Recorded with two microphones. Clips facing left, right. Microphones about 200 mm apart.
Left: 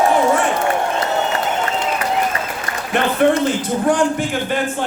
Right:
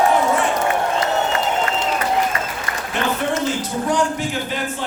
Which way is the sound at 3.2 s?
55° left (ahead or behind).